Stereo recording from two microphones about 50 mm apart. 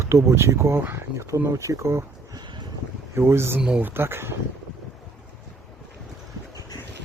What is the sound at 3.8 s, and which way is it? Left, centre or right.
Speech, right.